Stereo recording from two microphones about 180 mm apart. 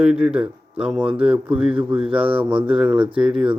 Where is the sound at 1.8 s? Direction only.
5° right (ahead or behind).